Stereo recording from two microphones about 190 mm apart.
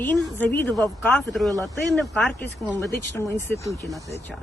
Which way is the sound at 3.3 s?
10° left (ahead or behind).